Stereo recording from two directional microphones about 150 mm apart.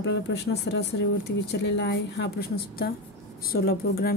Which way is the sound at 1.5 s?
90° left.